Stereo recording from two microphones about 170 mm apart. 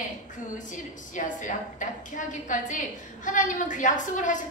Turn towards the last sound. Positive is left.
turn(degrees=50)  # may be behind; listen again after turning